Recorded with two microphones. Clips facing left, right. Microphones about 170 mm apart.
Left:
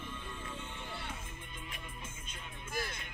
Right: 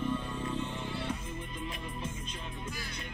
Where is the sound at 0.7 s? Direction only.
90° right.